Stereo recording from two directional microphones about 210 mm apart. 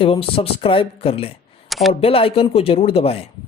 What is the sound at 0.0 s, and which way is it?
A man's voice, 25° left (ahead or behind).